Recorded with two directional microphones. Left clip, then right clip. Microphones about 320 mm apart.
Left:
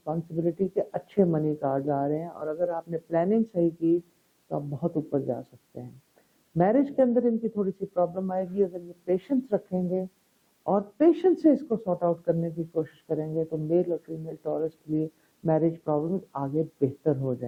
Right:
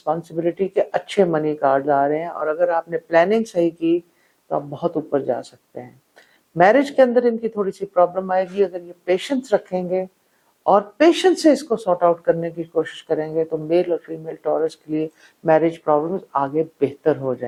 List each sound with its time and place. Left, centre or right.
0.0 s speech: centre
4.4 s speech: centre